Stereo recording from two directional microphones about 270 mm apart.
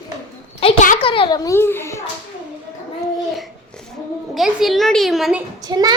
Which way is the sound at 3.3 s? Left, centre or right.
Centre.